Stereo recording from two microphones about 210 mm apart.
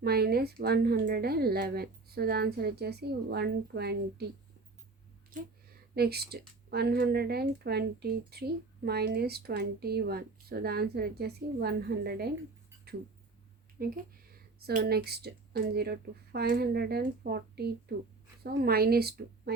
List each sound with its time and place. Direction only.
0.0 s speech: 50° right (ahead or behind)
5.9 s speech: 50° right (ahead or behind)
13.8 s speech: 45° right (ahead or behind)